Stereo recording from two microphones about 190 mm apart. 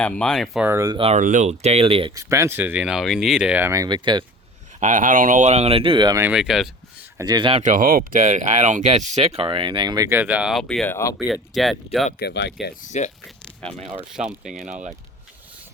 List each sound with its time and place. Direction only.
0.0 s speech: 5° left (ahead or behind)
0.7 s speech: 20° right (ahead or behind)
1.0 s speech: 40° right (ahead or behind)
2.1 s speech: 15° right (ahead or behind)
4.8 s speech: 40° right (ahead or behind); by 6.2 s 20° right (ahead or behind)
6.2 s speech: 5° right (ahead or behind)
7.2 s speech: 20° right (ahead or behind)
7.6 s speech: 45° right (ahead or behind); by 11.1 s 10° left (ahead or behind)
11.2 s speech: centre (ahead or behind)
12.2 s speech: 65° left (ahead or behind)
12.8 s speech: 40° left (ahead or behind)
13.2 s a sound: 5° left (ahead or behind)
14.1 s speech: 5° right (ahead or behind)
14.6 s speech: 40° right (ahead or behind)